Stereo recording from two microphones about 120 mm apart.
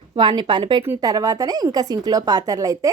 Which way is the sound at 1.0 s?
30° right (ahead or behind).